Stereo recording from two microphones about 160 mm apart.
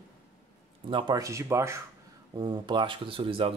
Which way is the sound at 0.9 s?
25° right (ahead or behind).